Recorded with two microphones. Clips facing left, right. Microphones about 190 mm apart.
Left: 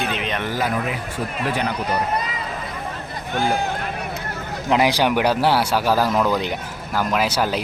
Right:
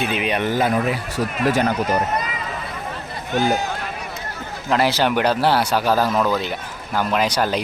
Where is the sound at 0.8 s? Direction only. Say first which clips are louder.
Right 4 dB; 40° right (ahead or behind).